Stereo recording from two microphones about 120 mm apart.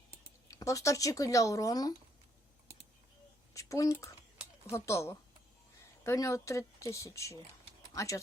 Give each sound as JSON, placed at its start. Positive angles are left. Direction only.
{"t": 0.5, "sound": "a woman's voice", "side_deg": 25}
{"t": 3.5, "sound": "a woman's voice", "side_deg": 25}